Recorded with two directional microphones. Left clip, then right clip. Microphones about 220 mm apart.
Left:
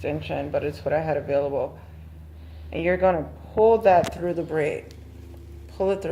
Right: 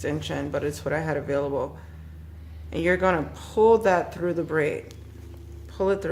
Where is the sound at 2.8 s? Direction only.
25° right (ahead or behind).